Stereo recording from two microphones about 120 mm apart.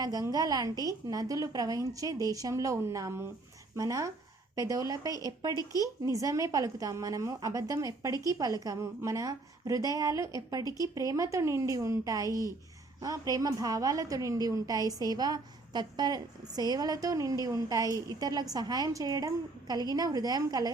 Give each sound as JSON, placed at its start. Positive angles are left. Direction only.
{"t": 0.0, "sound": "a woman's voice", "side_deg": -30}